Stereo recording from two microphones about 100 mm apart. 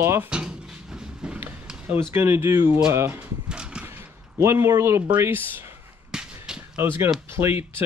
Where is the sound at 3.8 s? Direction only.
20° right (ahead or behind).